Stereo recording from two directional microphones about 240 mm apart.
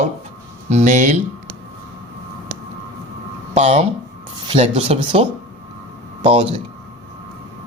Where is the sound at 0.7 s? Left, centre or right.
Right.